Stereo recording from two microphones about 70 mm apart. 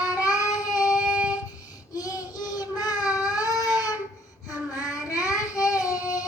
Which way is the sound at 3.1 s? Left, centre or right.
Left.